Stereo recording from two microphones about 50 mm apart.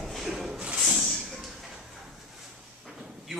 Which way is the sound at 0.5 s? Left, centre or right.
Right.